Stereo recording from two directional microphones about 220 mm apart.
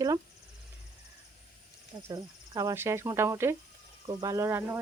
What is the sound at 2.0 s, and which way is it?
Speech, 15° right (ahead or behind).